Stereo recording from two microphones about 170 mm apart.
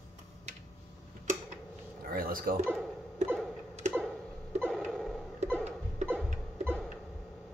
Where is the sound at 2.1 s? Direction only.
55° right (ahead or behind).